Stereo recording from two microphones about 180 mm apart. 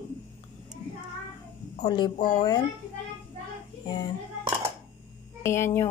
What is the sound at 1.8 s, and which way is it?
Speech, 25° left (ahead or behind).